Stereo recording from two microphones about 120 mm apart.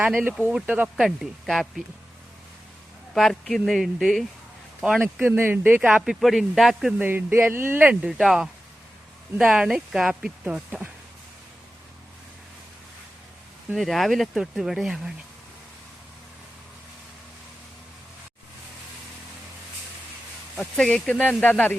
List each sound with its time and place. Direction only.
0.0 s speech: 5° right (ahead or behind)
0.4 s speech: 15° right (ahead or behind)
3.2 s speech: centre (ahead or behind)
5.2 s speech: 20° right (ahead or behind)
5.9 s speech: centre (ahead or behind)
7.0 s speech: 15° right (ahead or behind)
8.0 s speech: 5° right (ahead or behind)
13.7 s speech: centre (ahead or behind)
20.6 s speech: 5° left (ahead or behind)